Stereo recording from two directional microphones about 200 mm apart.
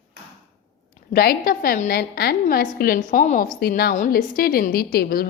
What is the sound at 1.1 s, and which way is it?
A woman's voice, 50° left (ahead or behind).